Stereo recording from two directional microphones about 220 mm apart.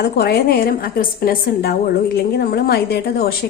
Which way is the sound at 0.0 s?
45° left (ahead or behind).